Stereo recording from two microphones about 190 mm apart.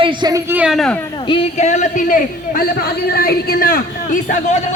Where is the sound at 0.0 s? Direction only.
20° right (ahead or behind).